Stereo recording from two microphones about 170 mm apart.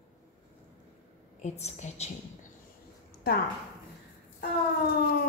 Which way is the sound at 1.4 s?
40° left (ahead or behind).